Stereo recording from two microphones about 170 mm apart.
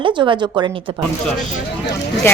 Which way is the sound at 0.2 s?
25° right (ahead or behind).